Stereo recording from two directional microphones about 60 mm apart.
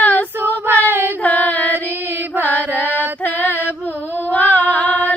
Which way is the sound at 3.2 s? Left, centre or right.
Left.